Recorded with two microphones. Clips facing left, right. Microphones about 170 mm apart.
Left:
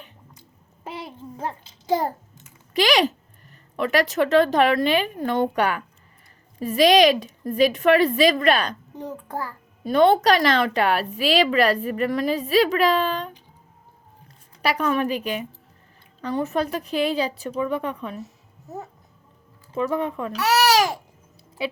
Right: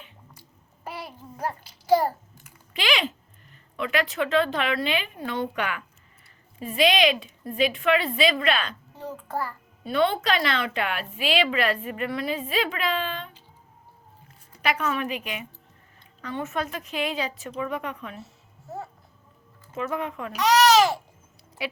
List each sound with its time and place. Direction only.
0.9 s child singing: 20° left (ahead or behind)
2.7 s a woman's voice: 40° left (ahead or behind)
9.0 s child singing: 15° left (ahead or behind)
9.8 s a woman's voice: 40° left (ahead or behind)
14.6 s a woman's voice: 35° left (ahead or behind)
19.7 s a woman's voice: 30° left (ahead or behind)
20.4 s speech: 10° left (ahead or behind)